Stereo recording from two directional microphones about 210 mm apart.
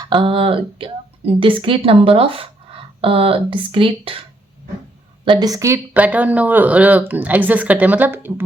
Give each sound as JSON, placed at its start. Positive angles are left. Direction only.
{"t": 0.0, "sound": "speech", "side_deg": -20}